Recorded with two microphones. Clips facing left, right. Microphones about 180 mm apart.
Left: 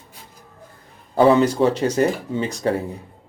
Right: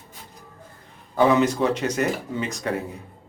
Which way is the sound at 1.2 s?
35° left (ahead or behind).